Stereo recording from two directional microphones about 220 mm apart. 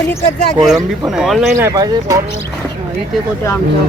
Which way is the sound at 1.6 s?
15° right (ahead or behind).